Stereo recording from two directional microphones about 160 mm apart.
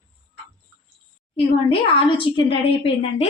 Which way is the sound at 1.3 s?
35° left (ahead or behind).